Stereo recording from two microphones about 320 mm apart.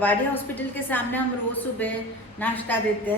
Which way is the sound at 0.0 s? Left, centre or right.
Centre.